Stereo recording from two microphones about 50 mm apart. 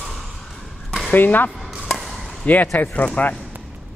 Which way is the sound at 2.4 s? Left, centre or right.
Left.